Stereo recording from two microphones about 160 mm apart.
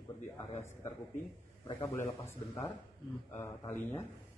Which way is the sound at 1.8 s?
20° left (ahead or behind).